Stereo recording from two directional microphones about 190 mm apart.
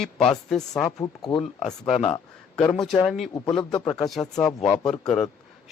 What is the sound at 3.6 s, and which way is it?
Speech, 20° left (ahead or behind).